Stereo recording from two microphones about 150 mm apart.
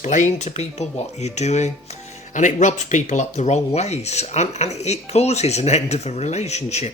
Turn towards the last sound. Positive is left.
turn(degrees=45)  # may be behind; listen again after turning